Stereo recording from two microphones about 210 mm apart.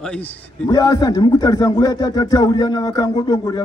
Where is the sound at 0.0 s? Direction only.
5° left (ahead or behind).